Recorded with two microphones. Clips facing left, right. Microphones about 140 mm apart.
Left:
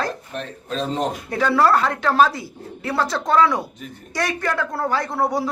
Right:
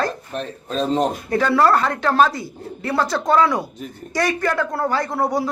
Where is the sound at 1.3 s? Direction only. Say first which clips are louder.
Right 1 dB; centre (ahead or behind).